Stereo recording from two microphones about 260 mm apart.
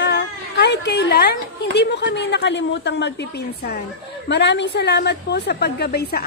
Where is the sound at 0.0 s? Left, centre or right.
Left.